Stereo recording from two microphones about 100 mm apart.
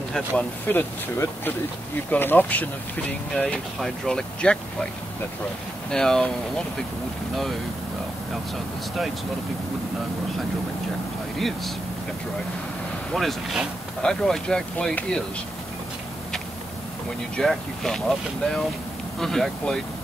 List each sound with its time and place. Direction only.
0.1 s speech: 15° left (ahead or behind)
5.9 s speech: 5° left (ahead or behind)
11.3 s speech: centre (ahead or behind)
13.1 s speech: centre (ahead or behind)
17.4 s speech: 5° left (ahead or behind)
19.1 s speech: 5° left (ahead or behind)